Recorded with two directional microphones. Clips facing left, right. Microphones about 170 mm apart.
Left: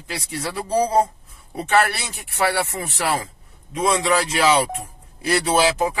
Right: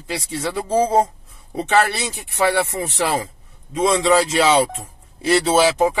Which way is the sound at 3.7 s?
25° right (ahead or behind).